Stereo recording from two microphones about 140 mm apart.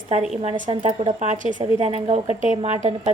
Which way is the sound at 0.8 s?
50° right (ahead or behind).